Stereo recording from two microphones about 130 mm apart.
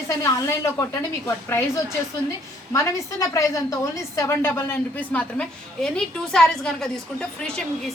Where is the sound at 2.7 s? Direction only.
20° left (ahead or behind).